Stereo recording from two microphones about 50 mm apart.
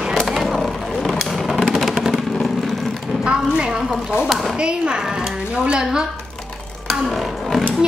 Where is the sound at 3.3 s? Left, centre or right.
Centre.